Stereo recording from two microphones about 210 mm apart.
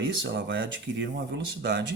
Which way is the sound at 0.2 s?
60° right (ahead or behind).